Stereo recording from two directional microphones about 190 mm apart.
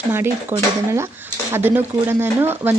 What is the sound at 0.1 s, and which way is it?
Speech, 15° right (ahead or behind).